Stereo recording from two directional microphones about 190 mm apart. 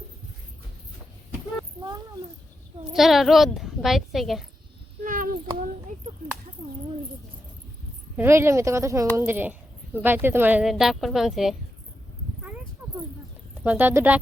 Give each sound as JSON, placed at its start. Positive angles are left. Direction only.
{"t": 2.9, "sound": "a child's voice", "side_deg": 0}
{"t": 5.0, "sound": "child singing", "side_deg": -45}
{"t": 8.1, "sound": "speech", "side_deg": -10}
{"t": 13.7, "sound": "speech", "side_deg": -10}